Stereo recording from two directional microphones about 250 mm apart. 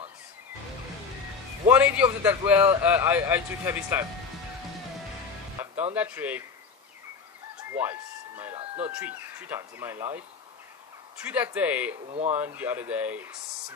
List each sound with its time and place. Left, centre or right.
1.7 s speech: centre
5.6 s music: centre
5.9 s speech: centre
7.7 s a sound: centre
8.7 s speech: centre
11.2 s speech: centre
12.1 s speech: right
12.4 s speech: centre